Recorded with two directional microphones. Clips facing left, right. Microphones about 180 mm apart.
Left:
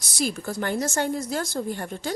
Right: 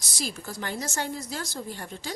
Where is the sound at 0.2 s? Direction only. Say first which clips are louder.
Left 7 dB; 55° left (ahead or behind).